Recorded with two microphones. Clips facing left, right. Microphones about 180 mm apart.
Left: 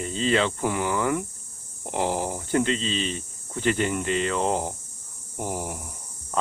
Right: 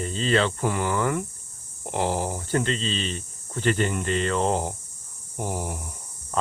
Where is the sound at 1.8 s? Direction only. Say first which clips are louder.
Even; 10° left (ahead or behind).